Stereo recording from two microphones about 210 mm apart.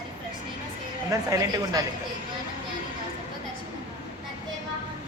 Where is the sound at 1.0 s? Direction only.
15° right (ahead or behind).